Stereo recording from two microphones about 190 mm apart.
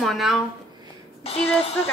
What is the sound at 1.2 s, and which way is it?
Speech, 30° left (ahead or behind).